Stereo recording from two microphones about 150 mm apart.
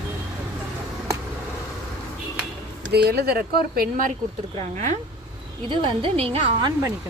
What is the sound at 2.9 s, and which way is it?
Speech, 90° right.